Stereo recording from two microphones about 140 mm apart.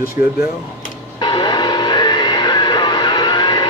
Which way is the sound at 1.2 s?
35° left (ahead or behind).